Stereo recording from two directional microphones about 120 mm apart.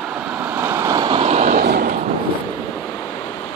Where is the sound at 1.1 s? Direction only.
60° right (ahead or behind).